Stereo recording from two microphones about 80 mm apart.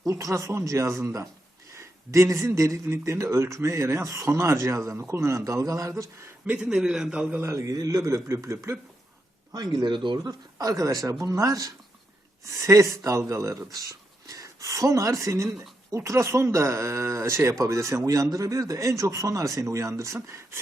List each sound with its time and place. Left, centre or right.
0.1 s speech: right
6.5 s a man's voice: centre
7.3 s speech: right
9.5 s speech: right
10.2 s speech: right
15.4 s speech: centre
16.0 s speech: right